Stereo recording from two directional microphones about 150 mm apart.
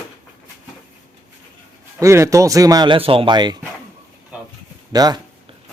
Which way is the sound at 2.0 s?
20° right (ahead or behind).